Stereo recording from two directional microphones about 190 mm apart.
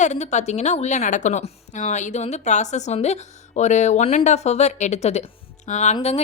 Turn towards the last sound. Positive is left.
turn(degrees=35)  # may be behind; listen again after turning